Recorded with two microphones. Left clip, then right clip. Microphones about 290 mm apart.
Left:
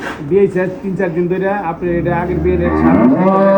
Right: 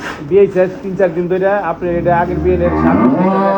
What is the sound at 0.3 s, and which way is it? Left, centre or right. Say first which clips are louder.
Speech: right 3 dB; left.